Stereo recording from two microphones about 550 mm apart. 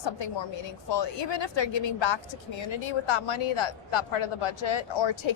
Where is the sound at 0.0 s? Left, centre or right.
Left.